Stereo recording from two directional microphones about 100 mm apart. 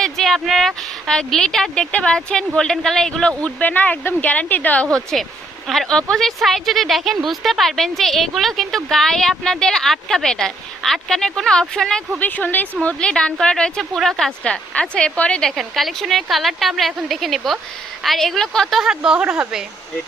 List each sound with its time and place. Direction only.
0.0 s speech: 5° left (ahead or behind)
5.1 s speech: centre (ahead or behind)
12.2 s speech: 15° left (ahead or behind); by 19.6 s 10° right (ahead or behind)